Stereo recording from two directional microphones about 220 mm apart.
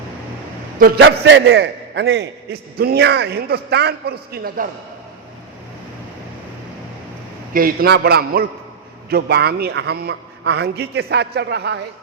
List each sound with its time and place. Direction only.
0.8 s a man's voice: 50° right (ahead or behind)
7.5 s a man's voice: 40° right (ahead or behind)